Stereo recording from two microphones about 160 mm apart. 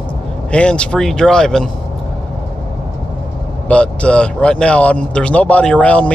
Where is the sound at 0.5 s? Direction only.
5° left (ahead or behind).